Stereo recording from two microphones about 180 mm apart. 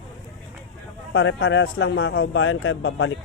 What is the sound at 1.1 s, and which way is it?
A man's voice, 90° left.